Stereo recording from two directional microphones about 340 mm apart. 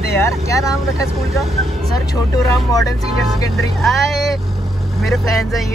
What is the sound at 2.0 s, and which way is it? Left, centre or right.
Speech, centre.